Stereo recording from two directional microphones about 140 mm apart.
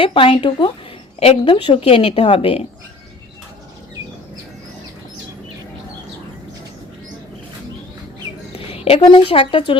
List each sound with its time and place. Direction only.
0.0 s a woman's voice: 40° left (ahead or behind)
8.5 s a woman's voice: 45° left (ahead or behind)